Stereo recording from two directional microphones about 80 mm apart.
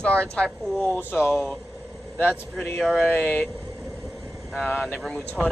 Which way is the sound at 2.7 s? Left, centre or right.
Centre.